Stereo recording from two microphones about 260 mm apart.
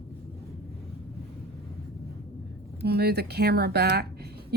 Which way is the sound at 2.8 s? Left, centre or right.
Right.